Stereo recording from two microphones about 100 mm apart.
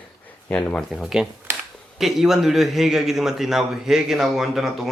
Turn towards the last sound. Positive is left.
turn(degrees=0)  # may be behind; listen again after turning